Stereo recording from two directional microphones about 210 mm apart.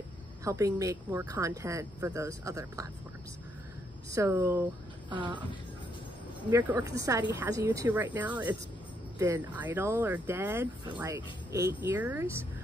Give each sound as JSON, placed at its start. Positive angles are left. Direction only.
{"t": 0.4, "sound": "speech", "side_deg": -15}
{"t": 4.1, "sound": "speech", "side_deg": -15}
{"t": 6.5, "sound": "speech", "side_deg": -15}